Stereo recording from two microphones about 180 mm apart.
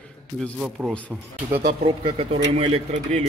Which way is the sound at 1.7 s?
30° right (ahead or behind).